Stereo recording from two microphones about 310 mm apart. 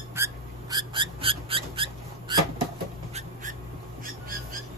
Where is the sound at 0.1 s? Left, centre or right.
Centre.